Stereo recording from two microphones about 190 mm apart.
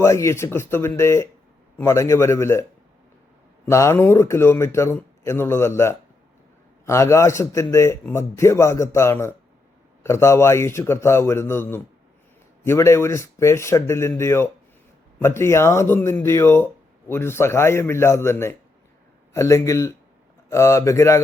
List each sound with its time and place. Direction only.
0.0 s a man's voice: 15° left (ahead or behind)
3.7 s a man's voice: 15° left (ahead or behind)